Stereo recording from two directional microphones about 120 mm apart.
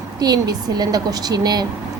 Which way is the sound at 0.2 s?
35° right (ahead or behind).